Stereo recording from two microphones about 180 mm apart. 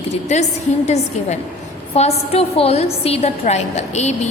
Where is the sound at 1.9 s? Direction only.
35° left (ahead or behind).